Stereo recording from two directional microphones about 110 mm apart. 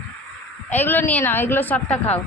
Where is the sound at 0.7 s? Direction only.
15° left (ahead or behind).